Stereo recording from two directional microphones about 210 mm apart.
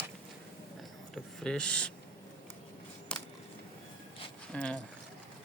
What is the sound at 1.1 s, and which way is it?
Speech, 5° left (ahead or behind).